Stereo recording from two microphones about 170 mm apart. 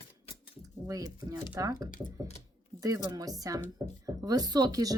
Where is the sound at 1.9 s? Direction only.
50° left (ahead or behind).